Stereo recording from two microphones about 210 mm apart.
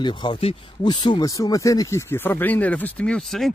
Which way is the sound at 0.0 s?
20° left (ahead or behind).